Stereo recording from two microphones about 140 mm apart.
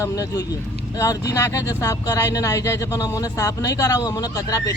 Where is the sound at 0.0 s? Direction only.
25° left (ahead or behind).